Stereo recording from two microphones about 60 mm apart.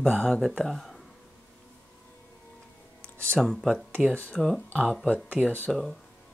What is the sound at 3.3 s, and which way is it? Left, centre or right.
Speech, centre.